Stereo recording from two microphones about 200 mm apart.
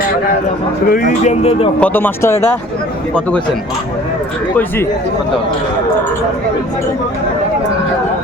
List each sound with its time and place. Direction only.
0.9 s speech: 45° left (ahead or behind)
1.8 s speech: 10° left (ahead or behind)